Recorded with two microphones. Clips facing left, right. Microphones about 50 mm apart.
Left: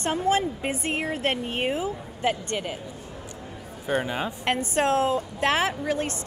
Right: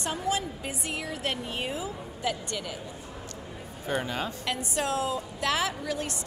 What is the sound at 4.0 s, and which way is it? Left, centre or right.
Speech, centre.